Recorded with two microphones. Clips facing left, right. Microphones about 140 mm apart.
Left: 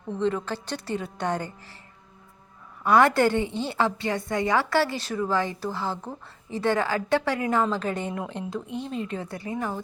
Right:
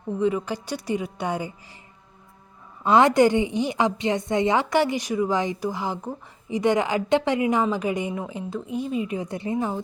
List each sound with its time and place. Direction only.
0.2 s a woman's voice: 10° right (ahead or behind)
2.8 s a woman's voice: 20° right (ahead or behind)